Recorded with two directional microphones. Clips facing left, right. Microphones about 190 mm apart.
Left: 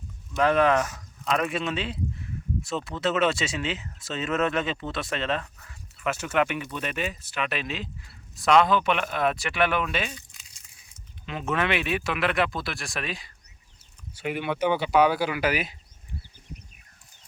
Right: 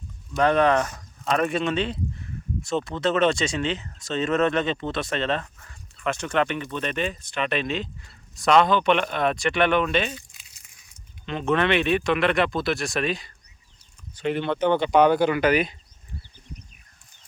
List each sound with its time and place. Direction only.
0.3 s speech: 35° right (ahead or behind)
1.4 s speech: centre (ahead or behind)
3.0 s speech: 5° left (ahead or behind)
4.3 s speech: 35° right (ahead or behind)
6.0 s speech: 5° left (ahead or behind)
11.3 s speech: 5° left (ahead or behind)